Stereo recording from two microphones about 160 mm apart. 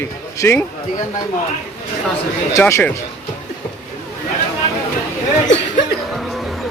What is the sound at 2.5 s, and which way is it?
Speech, 15° left (ahead or behind).